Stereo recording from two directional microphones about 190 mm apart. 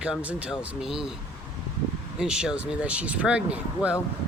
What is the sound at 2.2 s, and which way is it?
Speech, 5° right (ahead or behind).